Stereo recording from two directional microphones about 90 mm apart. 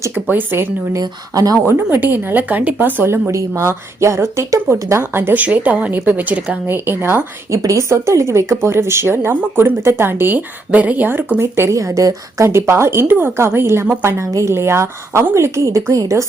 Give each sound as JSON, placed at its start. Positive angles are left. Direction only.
{"t": 0.1, "sound": "speech", "side_deg": -20}
{"t": 0.9, "sound": "speech", "side_deg": -40}
{"t": 6.7, "sound": "a woman's voice", "side_deg": -25}